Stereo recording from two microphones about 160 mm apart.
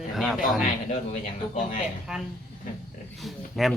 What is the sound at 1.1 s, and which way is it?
Speech, 55° left (ahead or behind).